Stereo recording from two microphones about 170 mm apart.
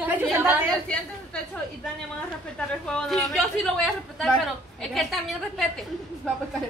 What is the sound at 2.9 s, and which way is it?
Speech, 5° left (ahead or behind).